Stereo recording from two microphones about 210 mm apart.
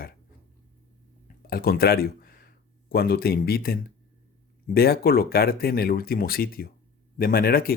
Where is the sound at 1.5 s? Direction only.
45° left (ahead or behind).